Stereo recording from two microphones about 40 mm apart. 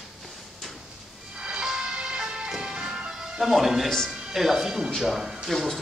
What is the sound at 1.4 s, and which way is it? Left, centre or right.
Music, right.